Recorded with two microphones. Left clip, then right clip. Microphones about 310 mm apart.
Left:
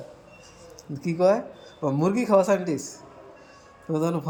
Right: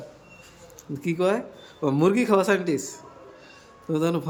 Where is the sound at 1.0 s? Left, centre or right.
Centre.